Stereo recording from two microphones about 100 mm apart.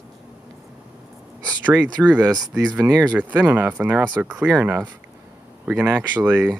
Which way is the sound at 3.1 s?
15° right (ahead or behind).